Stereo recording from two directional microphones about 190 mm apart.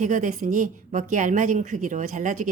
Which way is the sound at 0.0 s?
40° right (ahead or behind).